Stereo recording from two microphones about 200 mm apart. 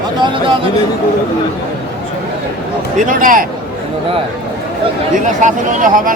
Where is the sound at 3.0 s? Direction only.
40° right (ahead or behind).